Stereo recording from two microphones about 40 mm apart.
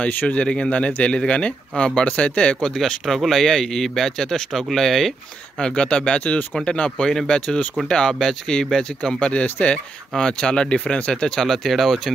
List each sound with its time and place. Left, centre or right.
0.3 s speech: left
2.6 s speech: centre
5.6 s speech: left
9.3 s speech: left
10.1 s speech: centre
11.3 s speech: centre